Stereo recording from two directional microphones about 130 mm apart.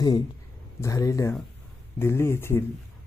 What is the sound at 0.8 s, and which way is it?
Speech, 25° left (ahead or behind).